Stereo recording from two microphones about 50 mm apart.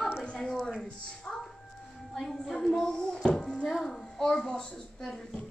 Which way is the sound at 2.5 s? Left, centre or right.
Centre.